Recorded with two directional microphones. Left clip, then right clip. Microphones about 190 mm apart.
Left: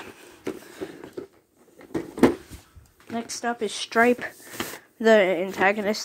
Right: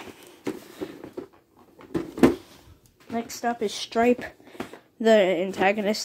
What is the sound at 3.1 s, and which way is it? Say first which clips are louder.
Speech: right 1 dB; 20° left (ahead or behind).